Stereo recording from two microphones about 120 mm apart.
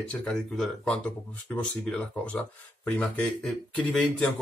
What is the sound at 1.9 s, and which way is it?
Speech, 10° left (ahead or behind).